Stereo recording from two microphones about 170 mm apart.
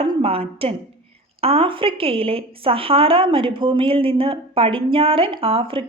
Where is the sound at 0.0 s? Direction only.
35° right (ahead or behind).